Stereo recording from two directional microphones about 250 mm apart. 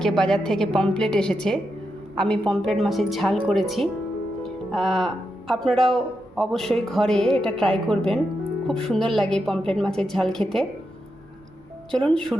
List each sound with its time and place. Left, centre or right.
0.0 s a woman's voice: centre
11.9 s speech: centre